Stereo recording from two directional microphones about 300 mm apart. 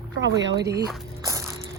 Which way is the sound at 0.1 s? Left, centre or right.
Right.